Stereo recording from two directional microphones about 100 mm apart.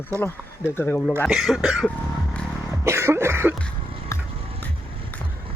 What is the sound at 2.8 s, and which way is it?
Speech, 25° right (ahead or behind).